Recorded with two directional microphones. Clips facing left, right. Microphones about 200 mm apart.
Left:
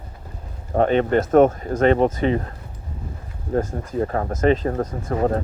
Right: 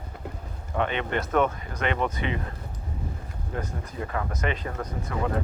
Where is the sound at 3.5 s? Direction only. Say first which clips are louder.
Left 12 dB; 45° left (ahead or behind).